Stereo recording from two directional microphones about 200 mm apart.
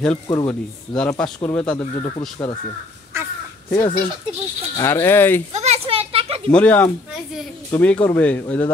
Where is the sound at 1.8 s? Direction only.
25° left (ahead or behind).